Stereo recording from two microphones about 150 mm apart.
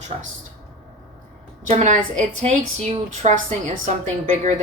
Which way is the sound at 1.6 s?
55° right (ahead or behind).